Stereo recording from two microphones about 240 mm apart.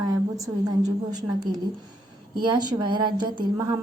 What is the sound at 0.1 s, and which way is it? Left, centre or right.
A woman's voice, centre.